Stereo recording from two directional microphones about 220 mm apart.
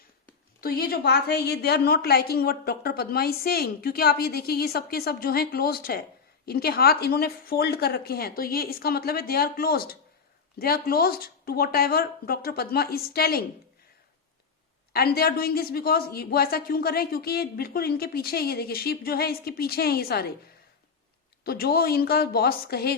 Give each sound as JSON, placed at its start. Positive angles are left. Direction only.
{"t": 0.6, "sound": "a woman's voice", "side_deg": 45}
{"t": 14.9, "sound": "a woman's voice", "side_deg": 45}
{"t": 21.4, "sound": "a woman's voice", "side_deg": 45}